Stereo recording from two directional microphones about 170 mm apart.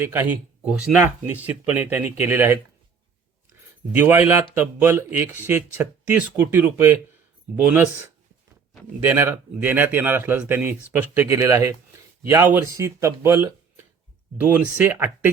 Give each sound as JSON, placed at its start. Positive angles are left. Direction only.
{"t": 0.0, "sound": "speech", "side_deg": -15}
{"t": 9.0, "sound": "speech", "side_deg": -10}